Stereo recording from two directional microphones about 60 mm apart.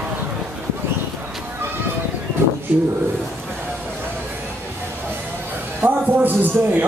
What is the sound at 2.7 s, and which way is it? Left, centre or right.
Speech, right.